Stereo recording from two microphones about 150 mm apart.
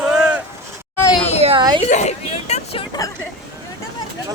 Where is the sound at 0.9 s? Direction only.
20° left (ahead or behind).